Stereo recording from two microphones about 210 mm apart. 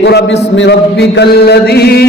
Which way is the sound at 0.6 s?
50° left (ahead or behind).